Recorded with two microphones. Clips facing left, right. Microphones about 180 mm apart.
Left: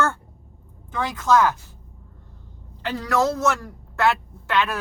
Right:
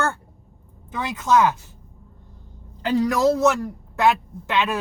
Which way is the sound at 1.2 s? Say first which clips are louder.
Even; 15° right (ahead or behind).